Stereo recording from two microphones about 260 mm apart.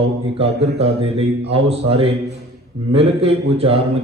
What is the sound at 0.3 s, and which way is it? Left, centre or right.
A man's voice, right.